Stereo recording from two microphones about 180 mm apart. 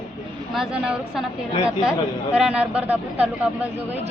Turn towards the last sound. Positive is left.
turn(degrees=-10)  # may be behind; listen again after turning